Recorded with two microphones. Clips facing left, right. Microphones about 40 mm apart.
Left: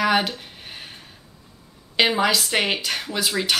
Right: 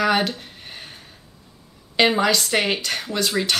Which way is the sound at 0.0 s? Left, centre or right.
Centre.